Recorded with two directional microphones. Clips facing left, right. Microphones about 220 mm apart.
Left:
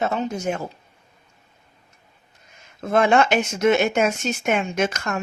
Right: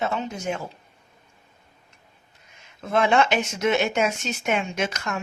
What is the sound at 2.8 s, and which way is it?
Speech, 45° left (ahead or behind).